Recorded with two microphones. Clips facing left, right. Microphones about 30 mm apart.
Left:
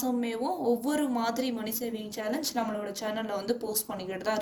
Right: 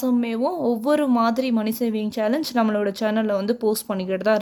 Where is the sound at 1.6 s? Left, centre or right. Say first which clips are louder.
Right 11 dB; right.